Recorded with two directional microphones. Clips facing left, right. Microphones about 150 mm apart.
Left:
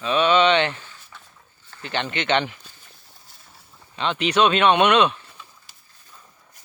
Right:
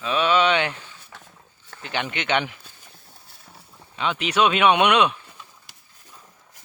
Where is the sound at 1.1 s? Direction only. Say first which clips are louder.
Right 3 dB; 70° right (ahead or behind).